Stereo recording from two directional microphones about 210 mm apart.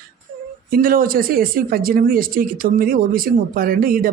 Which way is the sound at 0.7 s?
40° right (ahead or behind).